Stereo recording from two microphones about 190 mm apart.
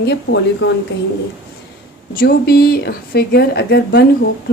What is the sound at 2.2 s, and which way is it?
Speech, 55° left (ahead or behind).